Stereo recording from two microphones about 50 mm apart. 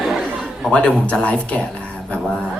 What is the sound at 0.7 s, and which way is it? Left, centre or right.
Speech, left.